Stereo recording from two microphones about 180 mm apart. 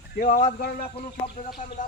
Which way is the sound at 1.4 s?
50° left (ahead or behind).